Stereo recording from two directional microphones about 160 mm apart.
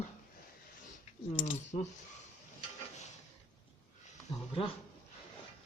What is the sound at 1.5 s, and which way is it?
Speech, 45° left (ahead or behind).